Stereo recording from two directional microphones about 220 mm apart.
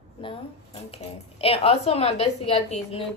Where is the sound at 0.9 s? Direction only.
25° left (ahead or behind).